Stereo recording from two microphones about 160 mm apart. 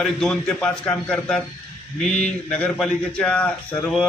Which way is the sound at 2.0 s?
45° left (ahead or behind).